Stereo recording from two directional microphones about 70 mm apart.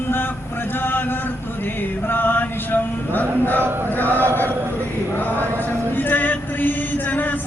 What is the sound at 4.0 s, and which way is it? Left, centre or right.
Chant, left.